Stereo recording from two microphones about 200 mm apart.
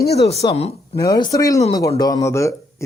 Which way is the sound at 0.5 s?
30° left (ahead or behind).